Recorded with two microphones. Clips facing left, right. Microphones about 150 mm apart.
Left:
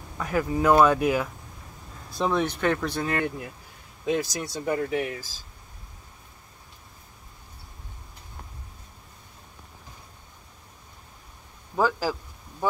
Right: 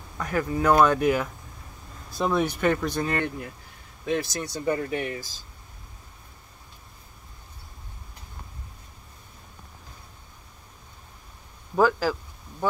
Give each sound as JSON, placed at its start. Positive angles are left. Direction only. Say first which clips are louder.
{"t": 0.2, "sound": "speech", "louder": "left 1 dB", "side_deg": 5}
{"t": 2.1, "sound": "speech", "louder": "right 1 dB", "side_deg": -5}
{"t": 4.0, "sound": "speech", "louder": "left 1 dB", "side_deg": 15}
{"t": 4.6, "sound": "speech", "louder": "even", "side_deg": 0}
{"t": 12.0, "sound": "a sound", "louder": "right 2 dB", "side_deg": 10}